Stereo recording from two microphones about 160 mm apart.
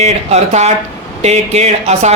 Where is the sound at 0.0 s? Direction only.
45° right (ahead or behind).